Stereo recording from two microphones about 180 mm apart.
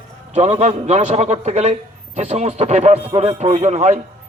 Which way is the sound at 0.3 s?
40° right (ahead or behind).